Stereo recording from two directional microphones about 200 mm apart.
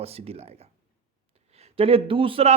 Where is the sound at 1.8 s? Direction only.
30° right (ahead or behind).